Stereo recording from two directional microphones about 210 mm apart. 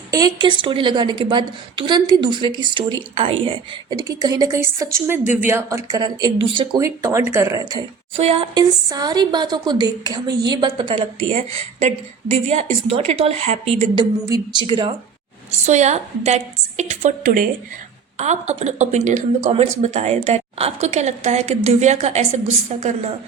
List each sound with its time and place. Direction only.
0.1 s a woman's voice: 20° right (ahead or behind)
12.9 s speech: 30° right (ahead or behind)
15.4 s a woman's voice: 35° right (ahead or behind)